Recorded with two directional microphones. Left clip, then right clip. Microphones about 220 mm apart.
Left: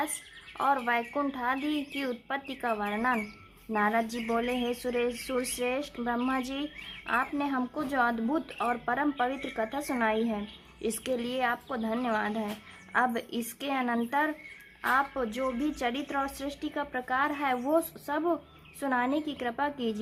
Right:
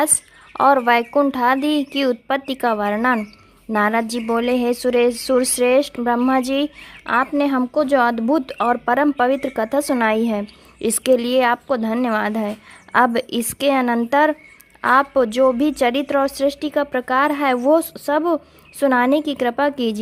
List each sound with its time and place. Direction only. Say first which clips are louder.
0.5 s a woman's voice: right 13 dB; 40° right (ahead or behind)